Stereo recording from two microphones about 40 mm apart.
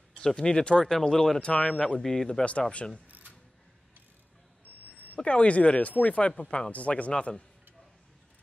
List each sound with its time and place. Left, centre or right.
0.2 s speech: centre
1.4 s speech: left
3.1 s a sound: right
5.1 s speech: left